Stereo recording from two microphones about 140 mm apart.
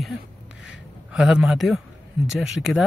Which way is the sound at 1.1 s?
5° right (ahead or behind).